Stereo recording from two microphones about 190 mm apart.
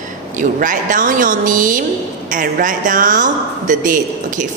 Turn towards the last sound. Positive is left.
turn(degrees=-45)  # may be behind; listen again after turning